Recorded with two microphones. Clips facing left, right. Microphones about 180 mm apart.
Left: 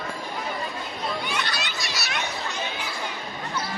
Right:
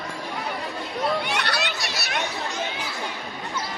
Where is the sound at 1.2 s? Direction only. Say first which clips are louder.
Right 3 dB; 70° right (ahead or behind).